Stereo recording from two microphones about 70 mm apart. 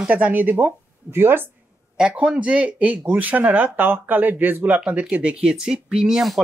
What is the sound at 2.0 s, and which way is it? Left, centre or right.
Speech, centre.